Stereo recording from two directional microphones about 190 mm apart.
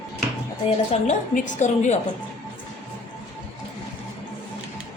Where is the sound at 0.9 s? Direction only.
40° left (ahead or behind).